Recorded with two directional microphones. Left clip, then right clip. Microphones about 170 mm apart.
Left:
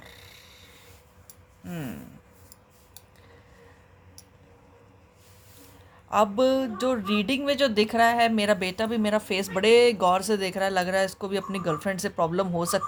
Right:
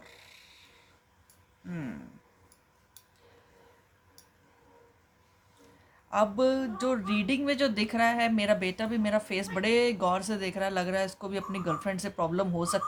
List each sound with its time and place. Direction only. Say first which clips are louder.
0.0 s snoring: left 5 dB; 35° left (ahead or behind)
6.1 s speech: left 4 dB; 40° left (ahead or behind)